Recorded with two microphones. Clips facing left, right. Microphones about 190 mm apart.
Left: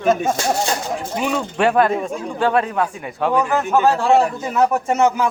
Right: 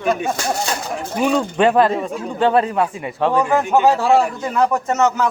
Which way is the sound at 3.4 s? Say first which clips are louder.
Right 3 dB; 15° right (ahead or behind).